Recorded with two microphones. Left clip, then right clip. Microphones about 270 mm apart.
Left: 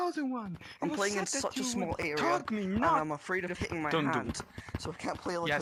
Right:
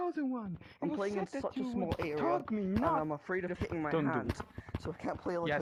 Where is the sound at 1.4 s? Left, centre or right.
Left.